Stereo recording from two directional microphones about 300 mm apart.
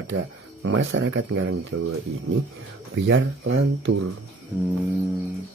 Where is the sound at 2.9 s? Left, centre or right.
Right.